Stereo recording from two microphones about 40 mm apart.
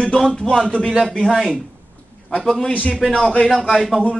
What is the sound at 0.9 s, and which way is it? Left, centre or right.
Speech, centre.